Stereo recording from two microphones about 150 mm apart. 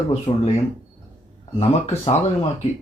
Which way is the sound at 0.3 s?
35° left (ahead or behind).